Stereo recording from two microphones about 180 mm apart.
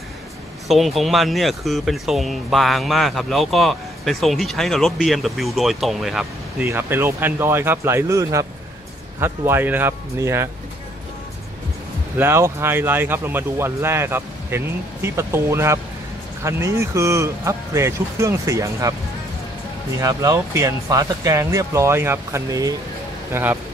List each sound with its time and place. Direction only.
0.7 s speech: centre (ahead or behind)
6.6 s speech: 15° right (ahead or behind)
12.2 s speech: 15° right (ahead or behind)
20.0 s speech: 20° right (ahead or behind)